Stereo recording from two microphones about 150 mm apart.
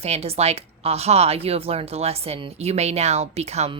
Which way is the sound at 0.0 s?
45° right (ahead or behind).